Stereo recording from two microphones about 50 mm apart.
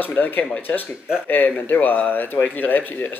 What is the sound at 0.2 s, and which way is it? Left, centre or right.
Speech, left.